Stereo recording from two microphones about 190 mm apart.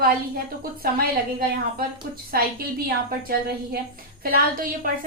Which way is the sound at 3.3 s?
55° right (ahead or behind).